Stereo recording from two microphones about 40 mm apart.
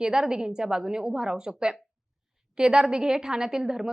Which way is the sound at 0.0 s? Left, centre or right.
Centre.